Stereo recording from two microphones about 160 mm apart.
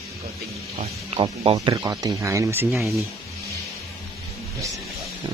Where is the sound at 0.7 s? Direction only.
35° right (ahead or behind); by 2.7 s 20° right (ahead or behind).